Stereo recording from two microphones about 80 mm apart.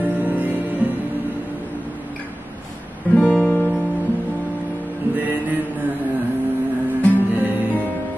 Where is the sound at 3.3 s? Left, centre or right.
Left.